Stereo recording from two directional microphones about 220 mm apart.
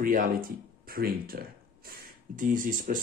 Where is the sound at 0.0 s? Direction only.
40° right (ahead or behind).